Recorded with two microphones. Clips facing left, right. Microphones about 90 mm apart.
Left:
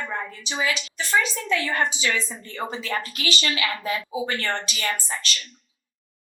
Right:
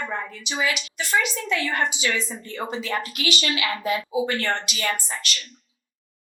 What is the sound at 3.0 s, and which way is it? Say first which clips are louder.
Speech: right 1 dB; 35° left (ahead or behind).